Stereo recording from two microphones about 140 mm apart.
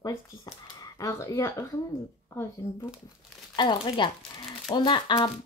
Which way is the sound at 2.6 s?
20° left (ahead or behind).